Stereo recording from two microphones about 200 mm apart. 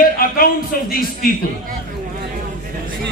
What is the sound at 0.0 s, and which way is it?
A man's voice, 45° left (ahead or behind).